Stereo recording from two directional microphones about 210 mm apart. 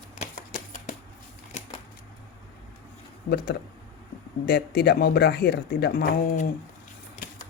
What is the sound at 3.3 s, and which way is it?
Speech, 45° left (ahead or behind).